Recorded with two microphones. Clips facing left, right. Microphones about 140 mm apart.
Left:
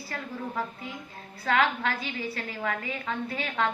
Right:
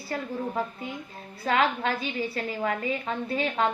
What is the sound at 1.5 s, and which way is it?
A woman's voice, 30° right (ahead or behind).